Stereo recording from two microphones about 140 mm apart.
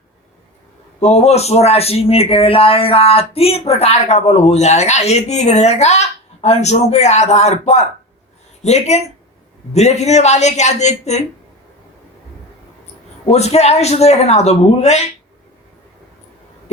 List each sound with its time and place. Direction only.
0.9 s a man's voice: 50° left (ahead or behind)
13.2 s a man's voice: 50° left (ahead or behind)